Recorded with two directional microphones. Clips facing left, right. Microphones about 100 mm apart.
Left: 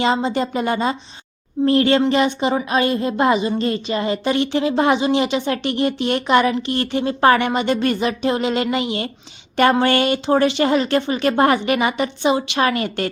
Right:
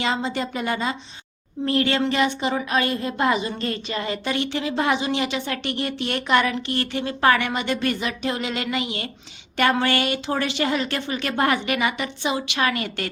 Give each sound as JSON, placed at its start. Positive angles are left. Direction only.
{"t": 0.0, "sound": "a woman's voice", "side_deg": 30}